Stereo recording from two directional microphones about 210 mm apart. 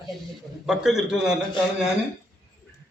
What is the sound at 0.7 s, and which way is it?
Speech, centre (ahead or behind).